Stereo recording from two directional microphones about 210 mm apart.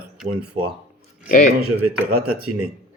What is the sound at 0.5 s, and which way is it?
Speech, 30° right (ahead or behind).